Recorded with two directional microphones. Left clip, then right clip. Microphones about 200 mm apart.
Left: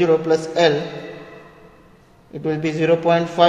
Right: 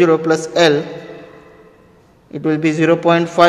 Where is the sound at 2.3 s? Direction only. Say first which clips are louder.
Right 6 dB; 45° right (ahead or behind).